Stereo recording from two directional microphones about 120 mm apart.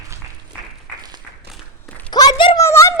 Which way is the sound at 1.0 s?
35° right (ahead or behind).